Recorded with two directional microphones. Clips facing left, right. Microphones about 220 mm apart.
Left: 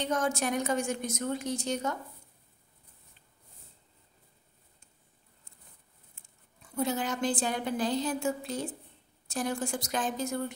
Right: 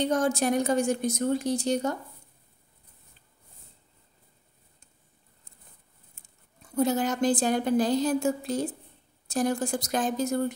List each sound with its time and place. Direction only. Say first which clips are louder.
0.0 s a woman's voice: right 5 dB; 35° right (ahead or behind)
6.7 s a woman's voice: right 6 dB; 40° right (ahead or behind)